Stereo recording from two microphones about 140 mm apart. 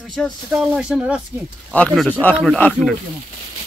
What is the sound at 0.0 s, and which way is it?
Speech, centre (ahead or behind).